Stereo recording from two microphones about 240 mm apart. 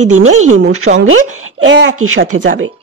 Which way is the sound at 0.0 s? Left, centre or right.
Right.